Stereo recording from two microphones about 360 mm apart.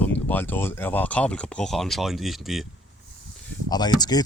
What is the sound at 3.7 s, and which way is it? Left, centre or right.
Speech, centre.